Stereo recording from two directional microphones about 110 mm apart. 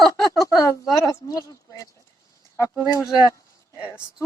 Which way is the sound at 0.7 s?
30° left (ahead or behind).